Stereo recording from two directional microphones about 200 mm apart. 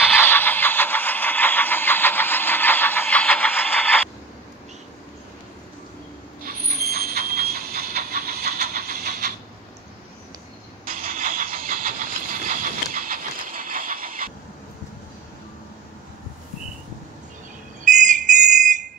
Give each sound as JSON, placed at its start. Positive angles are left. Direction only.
{"t": 0.1, "sound": "a sound", "side_deg": 10}
{"t": 6.4, "sound": "train", "side_deg": -50}
{"t": 10.9, "sound": "vehicle", "side_deg": -45}
{"t": 17.8, "sound": "whistle", "side_deg": -40}